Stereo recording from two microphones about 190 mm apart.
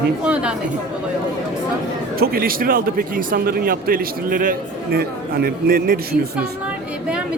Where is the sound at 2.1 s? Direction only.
50° right (ahead or behind).